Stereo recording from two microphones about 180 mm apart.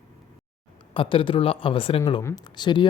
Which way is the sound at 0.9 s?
30° left (ahead or behind).